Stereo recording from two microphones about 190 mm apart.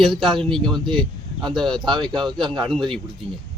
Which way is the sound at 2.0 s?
25° right (ahead or behind).